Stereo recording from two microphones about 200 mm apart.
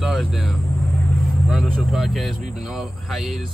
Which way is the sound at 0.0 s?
Centre (ahead or behind).